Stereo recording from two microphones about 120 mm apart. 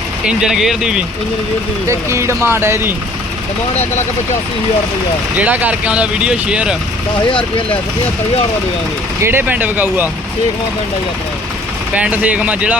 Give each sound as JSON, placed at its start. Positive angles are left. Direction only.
{"t": 0.3, "sound": "speech", "side_deg": -5}
{"t": 1.9, "sound": "speech", "side_deg": -25}
{"t": 5.4, "sound": "speech", "side_deg": -10}
{"t": 7.3, "sound": "speech", "side_deg": 45}
{"t": 9.2, "sound": "speech", "side_deg": -15}
{"t": 11.9, "sound": "speech", "side_deg": -10}